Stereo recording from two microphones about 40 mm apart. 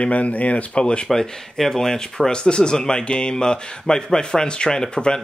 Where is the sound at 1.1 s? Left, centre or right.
Centre.